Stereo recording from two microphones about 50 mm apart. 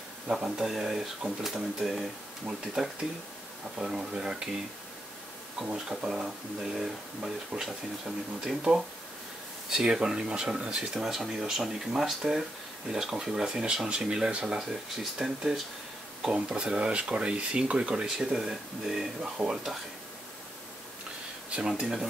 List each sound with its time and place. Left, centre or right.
0.3 s speech: centre
5.6 s speech: centre
8.5 s speech: centre
12.9 s speech: centre
14.6 s speech: centre
16.3 s speech: right
18.0 s speech: centre
21.5 s speech: right